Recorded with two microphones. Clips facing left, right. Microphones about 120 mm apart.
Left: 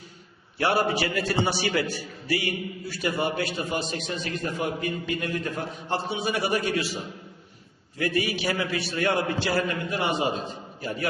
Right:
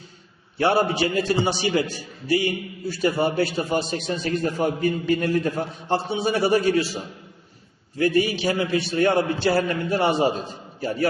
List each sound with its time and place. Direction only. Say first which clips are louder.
0.6 s a man's voice: right 4 dB; 25° right (ahead or behind)
7.9 s a man's voice: right 6 dB; 30° right (ahead or behind)